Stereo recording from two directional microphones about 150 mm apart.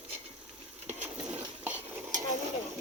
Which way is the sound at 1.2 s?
10° right (ahead or behind).